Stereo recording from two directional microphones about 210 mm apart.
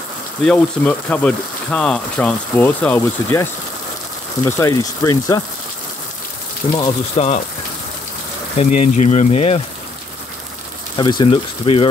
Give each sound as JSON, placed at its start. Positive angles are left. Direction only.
{"t": 0.5, "sound": "speech", "side_deg": 5}
{"t": 4.5, "sound": "speech", "side_deg": 15}
{"t": 6.6, "sound": "speech", "side_deg": 25}
{"t": 8.5, "sound": "speech", "side_deg": 35}
{"t": 11.0, "sound": "speech", "side_deg": 20}